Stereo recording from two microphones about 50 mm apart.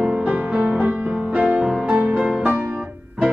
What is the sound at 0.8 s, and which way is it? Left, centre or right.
Music, right.